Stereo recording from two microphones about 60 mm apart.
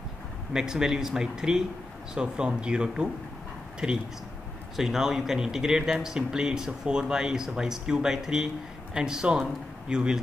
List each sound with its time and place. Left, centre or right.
0.5 s speech: centre